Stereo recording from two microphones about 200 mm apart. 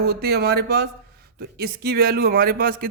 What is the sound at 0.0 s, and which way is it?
Speech, 50° right (ahead or behind).